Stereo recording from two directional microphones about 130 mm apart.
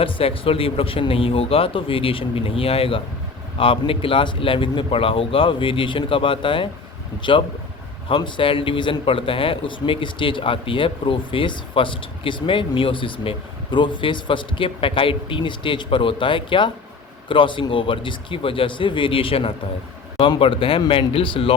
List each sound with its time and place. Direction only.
0.0 s a man's voice: 45° left (ahead or behind)